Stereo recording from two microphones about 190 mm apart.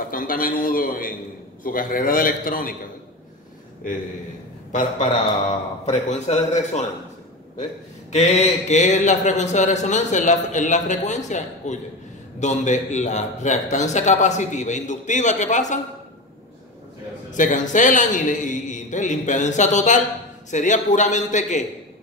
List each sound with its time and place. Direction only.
0.0 s a man's voice: 45° left (ahead or behind)
4.7 s speech: 40° left (ahead or behind)
8.1 s speech: 35° left (ahead or behind)
17.3 s speech: 40° left (ahead or behind)